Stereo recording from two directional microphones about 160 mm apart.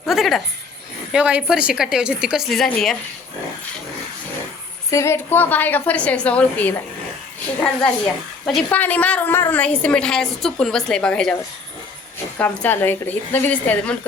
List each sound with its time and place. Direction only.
0.0 s a woman's voice: centre (ahead or behind)
4.9 s a woman's voice: 20° left (ahead or behind)
8.4 s a woman's voice: 5° left (ahead or behind)
12.4 s a woman's voice: 10° left (ahead or behind)